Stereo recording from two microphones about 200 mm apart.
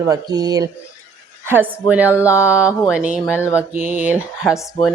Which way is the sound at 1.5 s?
10° right (ahead or behind).